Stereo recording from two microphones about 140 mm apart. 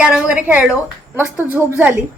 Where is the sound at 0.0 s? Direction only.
5° right (ahead or behind).